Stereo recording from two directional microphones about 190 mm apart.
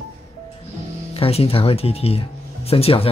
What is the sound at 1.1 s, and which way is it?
Speech, 30° left (ahead or behind).